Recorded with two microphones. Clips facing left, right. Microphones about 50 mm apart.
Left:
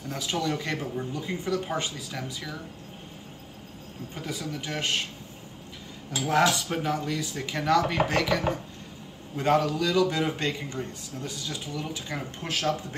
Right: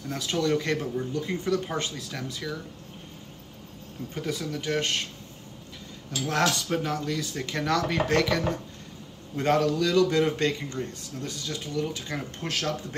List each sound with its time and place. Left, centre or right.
0.1 s a man's voice: centre
4.1 s a man's voice: centre
6.1 s a man's voice: centre